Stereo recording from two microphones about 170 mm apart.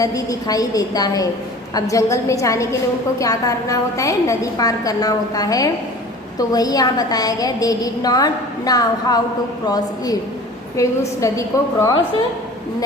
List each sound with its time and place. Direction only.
0.0 s a woman's voice: 20° left (ahead or behind)